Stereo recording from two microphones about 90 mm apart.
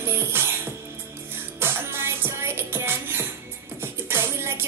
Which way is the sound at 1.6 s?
25° right (ahead or behind).